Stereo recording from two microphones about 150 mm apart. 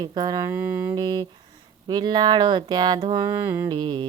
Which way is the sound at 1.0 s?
25° right (ahead or behind).